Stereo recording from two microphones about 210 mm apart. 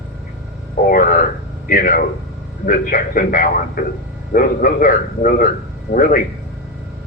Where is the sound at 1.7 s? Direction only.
45° left (ahead or behind).